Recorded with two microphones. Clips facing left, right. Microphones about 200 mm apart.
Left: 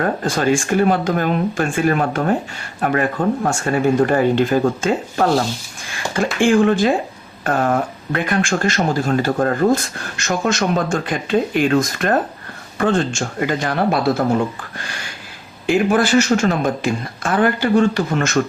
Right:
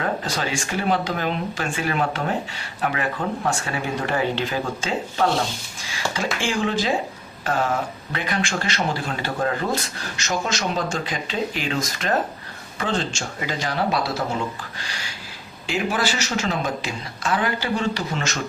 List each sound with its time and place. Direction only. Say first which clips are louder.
0.0 s speech: left 7 dB; 50° left (ahead or behind)
6.4 s speech: left 11 dB; 55° left (ahead or behind)